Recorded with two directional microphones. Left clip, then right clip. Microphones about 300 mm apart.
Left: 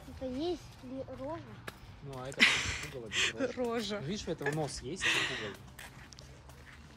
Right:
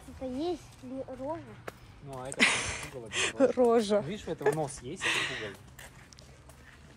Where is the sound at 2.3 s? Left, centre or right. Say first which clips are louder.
Even; centre.